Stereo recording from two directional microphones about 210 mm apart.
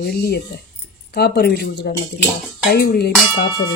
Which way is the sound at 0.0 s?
50° left (ahead or behind).